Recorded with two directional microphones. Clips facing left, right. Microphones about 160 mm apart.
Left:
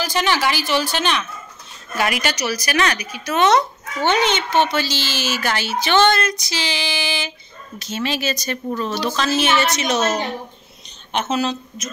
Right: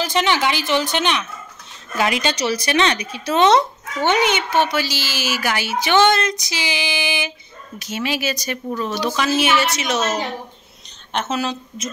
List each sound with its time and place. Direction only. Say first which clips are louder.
0.0 s speech: right 1 dB; 20° right (ahead or behind); by 10.0 s 5° right (ahead or behind)
11.2 s a woman's voice: left 3 dB; 5° right (ahead or behind)